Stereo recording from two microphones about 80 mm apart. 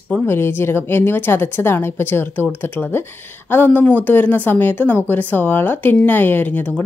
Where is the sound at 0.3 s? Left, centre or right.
Left.